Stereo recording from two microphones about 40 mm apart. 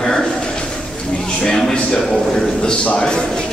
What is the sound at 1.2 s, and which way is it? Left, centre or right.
A man's voice, centre.